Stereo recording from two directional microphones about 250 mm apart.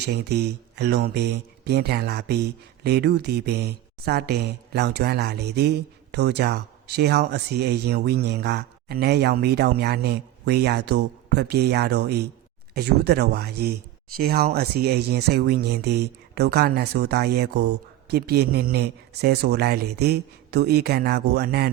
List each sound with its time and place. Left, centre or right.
0.0 s speech: right